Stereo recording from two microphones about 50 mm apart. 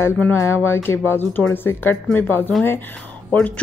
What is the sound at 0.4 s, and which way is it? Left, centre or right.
Speech, left.